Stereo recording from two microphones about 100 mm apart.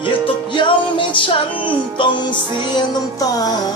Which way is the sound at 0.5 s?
55° left (ahead or behind).